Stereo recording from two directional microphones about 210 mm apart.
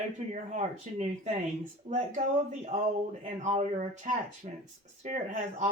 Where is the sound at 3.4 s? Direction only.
35° right (ahead or behind).